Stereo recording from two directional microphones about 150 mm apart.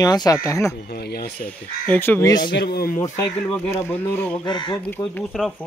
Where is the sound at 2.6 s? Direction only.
90° left.